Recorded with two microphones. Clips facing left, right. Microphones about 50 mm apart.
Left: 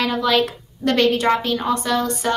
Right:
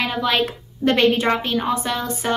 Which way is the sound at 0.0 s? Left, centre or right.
Centre.